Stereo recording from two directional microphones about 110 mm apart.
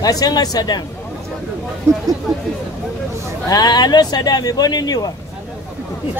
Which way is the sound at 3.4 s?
35° left (ahead or behind).